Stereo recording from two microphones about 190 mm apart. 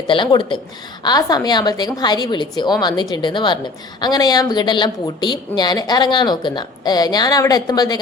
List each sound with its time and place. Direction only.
0.1 s a woman's voice: 25° left (ahead or behind)